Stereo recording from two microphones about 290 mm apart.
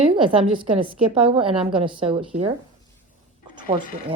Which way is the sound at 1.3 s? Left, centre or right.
Centre.